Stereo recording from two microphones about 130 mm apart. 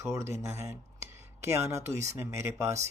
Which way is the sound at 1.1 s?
20° right (ahead or behind).